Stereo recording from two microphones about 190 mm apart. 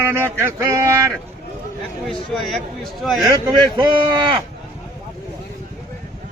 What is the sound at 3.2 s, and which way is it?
Speech, 20° right (ahead or behind).